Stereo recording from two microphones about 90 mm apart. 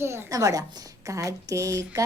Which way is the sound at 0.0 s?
30° right (ahead or behind).